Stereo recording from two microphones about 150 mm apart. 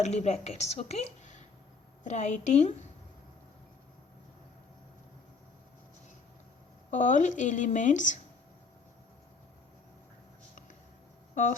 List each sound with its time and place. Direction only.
0.0 s a woman's voice: 50° left (ahead or behind)
6.9 s speech: 55° left (ahead or behind)